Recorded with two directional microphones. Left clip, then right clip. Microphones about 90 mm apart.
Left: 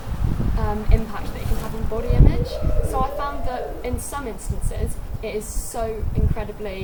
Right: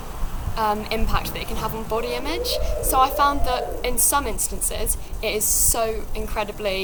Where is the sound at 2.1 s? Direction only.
25° right (ahead or behind).